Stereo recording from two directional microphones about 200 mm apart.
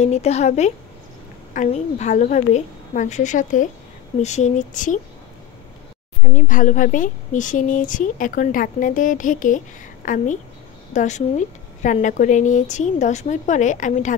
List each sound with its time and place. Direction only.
0.0 s a woman's voice: 35° left (ahead or behind)
6.2 s a woman's voice: 40° left (ahead or behind)